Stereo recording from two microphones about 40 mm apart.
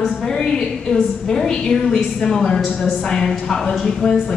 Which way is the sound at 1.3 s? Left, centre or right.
Centre.